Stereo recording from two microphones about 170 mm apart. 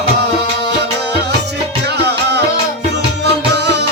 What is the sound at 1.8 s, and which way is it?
Music, 80° right.